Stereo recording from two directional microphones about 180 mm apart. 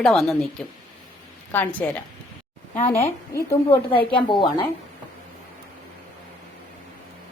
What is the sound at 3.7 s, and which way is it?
Speech, 30° left (ahead or behind).